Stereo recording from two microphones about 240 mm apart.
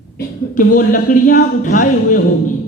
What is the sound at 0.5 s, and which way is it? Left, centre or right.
A man's voice, left.